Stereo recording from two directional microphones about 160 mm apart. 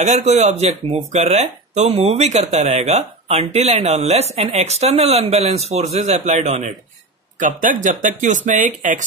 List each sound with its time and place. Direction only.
0.0 s speech: 45° right (ahead or behind)